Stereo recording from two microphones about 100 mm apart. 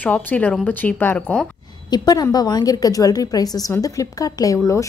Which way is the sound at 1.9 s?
40° left (ahead or behind).